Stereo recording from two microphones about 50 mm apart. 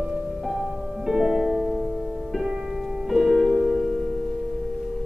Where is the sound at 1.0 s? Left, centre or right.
Centre.